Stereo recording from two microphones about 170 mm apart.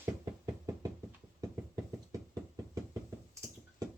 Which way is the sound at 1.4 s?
20° right (ahead or behind).